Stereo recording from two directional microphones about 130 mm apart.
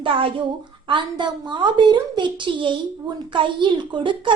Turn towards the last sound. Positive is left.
turn(degrees=-40)  # may be behind; listen again after turning